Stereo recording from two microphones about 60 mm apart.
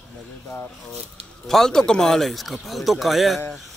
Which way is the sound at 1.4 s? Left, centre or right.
Centre.